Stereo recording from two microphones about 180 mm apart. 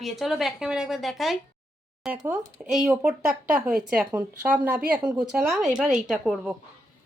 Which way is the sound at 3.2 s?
50° right (ahead or behind).